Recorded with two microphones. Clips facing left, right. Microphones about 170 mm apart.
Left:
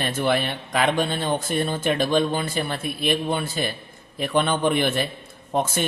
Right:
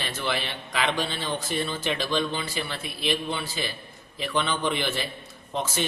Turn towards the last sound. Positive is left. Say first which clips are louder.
# left 5 dB
turn(degrees=55)  # may be behind; listen again after turning